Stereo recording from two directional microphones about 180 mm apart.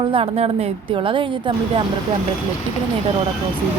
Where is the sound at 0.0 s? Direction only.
30° right (ahead or behind).